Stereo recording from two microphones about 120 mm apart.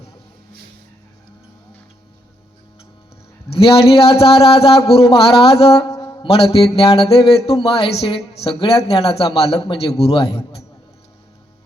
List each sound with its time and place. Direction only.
3.5 s a man's voice: 50° left (ahead or behind)
5.9 s a sound: 30° left (ahead or behind)
6.2 s a man's voice: 55° left (ahead or behind)